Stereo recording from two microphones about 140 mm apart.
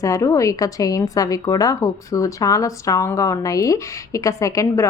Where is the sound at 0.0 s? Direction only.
20° left (ahead or behind).